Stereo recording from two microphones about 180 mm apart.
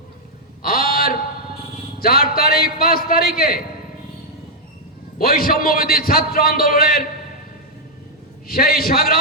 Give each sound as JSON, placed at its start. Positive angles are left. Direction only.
{"t": 0.6, "sound": "a sound", "side_deg": 55}
{"t": 2.0, "sound": "a man's voice", "side_deg": 55}
{"t": 5.2, "sound": "a man's voice", "side_deg": 55}
{"t": 8.4, "sound": "a man's voice", "side_deg": 55}